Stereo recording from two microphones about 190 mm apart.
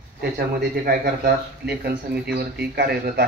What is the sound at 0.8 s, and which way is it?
Speech, 50° right (ahead or behind).